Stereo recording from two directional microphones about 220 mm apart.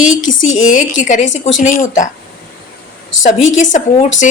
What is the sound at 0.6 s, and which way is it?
Speech, 35° left (ahead or behind).